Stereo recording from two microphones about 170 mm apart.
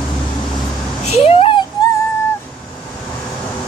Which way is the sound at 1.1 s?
35° left (ahead or behind).